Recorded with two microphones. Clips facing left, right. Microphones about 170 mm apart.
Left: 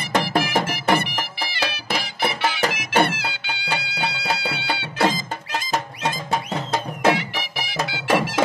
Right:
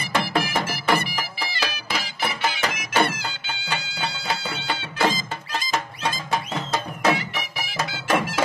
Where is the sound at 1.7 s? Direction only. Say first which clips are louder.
Left 2 dB; 70° left (ahead or behind).